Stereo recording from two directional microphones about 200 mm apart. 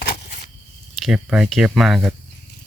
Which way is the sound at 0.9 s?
Centre (ahead or behind).